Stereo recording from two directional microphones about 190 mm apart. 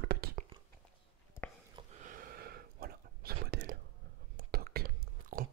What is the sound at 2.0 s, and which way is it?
Whispering, 45° right (ahead or behind).